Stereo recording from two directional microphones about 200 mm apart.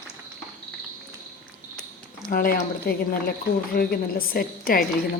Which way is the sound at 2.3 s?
40° left (ahead or behind).